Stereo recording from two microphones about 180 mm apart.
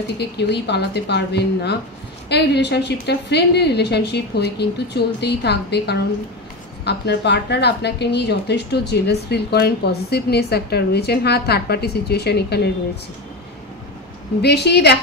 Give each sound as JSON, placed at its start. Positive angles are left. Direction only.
{"t": 0.2, "sound": "a woman's voice", "side_deg": 65}
{"t": 14.4, "sound": "a woman's voice", "side_deg": 65}